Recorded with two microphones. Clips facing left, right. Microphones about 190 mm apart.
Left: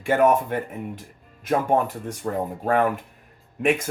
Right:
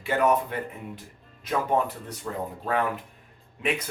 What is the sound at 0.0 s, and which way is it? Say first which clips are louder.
Speech: left 4 dB; 50° left (ahead or behind).